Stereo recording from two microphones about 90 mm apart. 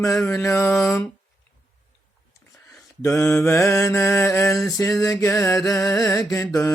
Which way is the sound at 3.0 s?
25° left (ahead or behind).